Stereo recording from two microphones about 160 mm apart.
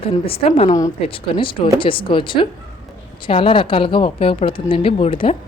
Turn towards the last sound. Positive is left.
turn(degrees=35)  # may be behind; listen again after turning